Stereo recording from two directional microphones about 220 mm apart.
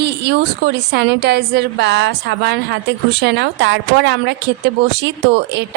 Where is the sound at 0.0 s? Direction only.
50° right (ahead or behind).